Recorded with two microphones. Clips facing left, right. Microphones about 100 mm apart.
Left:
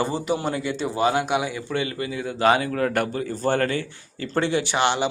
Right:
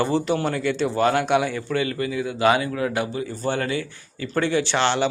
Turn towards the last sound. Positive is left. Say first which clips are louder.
# right 1 dB
turn(degrees=10)  # may be behind; listen again after turning